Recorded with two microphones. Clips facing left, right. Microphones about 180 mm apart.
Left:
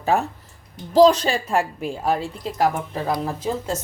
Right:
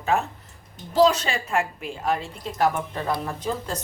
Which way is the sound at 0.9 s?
35° left (ahead or behind).